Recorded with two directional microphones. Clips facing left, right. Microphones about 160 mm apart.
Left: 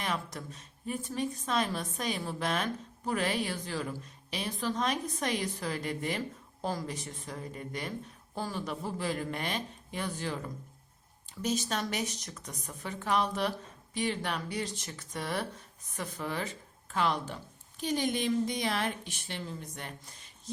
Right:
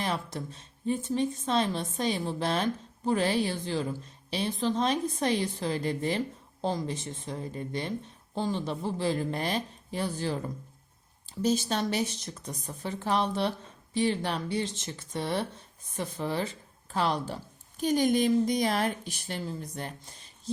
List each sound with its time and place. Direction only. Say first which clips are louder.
0.0 s a woman's voice: right 3 dB; 30° right (ahead or behind)